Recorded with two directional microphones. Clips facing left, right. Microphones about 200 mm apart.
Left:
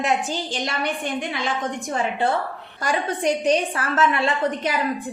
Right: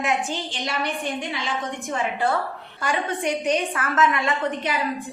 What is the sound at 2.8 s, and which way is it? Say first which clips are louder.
A woman's voice: left 2 dB; 35° left (ahead or behind).